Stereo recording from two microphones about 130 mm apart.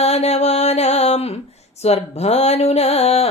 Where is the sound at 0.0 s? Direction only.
55° left (ahead or behind).